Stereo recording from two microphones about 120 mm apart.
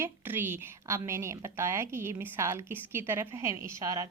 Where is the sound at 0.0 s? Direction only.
20° right (ahead or behind).